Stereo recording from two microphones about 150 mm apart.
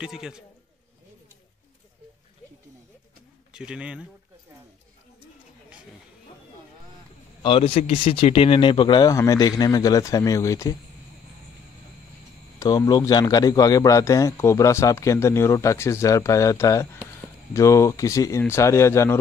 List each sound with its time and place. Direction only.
0.0 s a man's voice: 5° right (ahead or behind)
3.5 s a man's voice: 5° right (ahead or behind)
7.4 s a man's voice: 40° left (ahead or behind); by 10.8 s 20° left (ahead or behind)
12.5 s a man's voice: 25° left (ahead or behind)